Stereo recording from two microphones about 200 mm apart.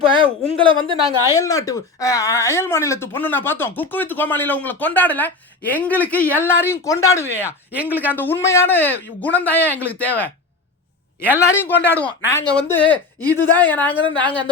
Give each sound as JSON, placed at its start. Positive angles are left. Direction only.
{"t": 0.0, "sound": "a woman's voice", "side_deg": -25}
{"t": 1.3, "sound": "speech", "side_deg": 15}
{"t": 11.3, "sound": "speech", "side_deg": 10}
{"t": 14.0, "sound": "a woman's voice", "side_deg": -25}